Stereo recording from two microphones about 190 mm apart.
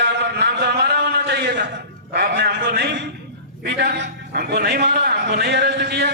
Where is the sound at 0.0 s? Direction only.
60° right (ahead or behind).